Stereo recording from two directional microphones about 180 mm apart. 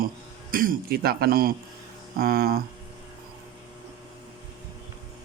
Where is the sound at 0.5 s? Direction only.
50° right (ahead or behind).